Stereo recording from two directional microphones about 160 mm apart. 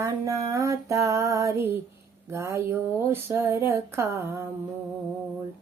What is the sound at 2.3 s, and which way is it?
Speech, 15° right (ahead or behind).